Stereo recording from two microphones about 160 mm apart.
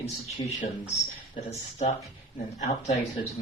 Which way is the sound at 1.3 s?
45° left (ahead or behind).